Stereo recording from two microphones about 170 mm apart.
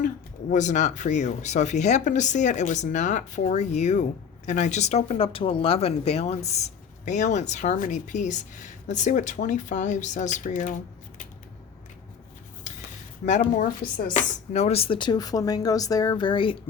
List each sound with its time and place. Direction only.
0.5 s speech: 45° left (ahead or behind)
13.6 s speech: 50° left (ahead or behind); by 16.6 s 30° left (ahead or behind)